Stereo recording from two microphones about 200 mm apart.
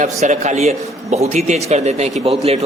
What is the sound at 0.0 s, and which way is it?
A man's voice, 35° right (ahead or behind).